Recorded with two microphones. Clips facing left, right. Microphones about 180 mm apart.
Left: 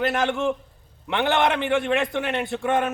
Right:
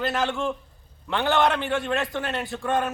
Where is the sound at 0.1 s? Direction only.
15° left (ahead or behind).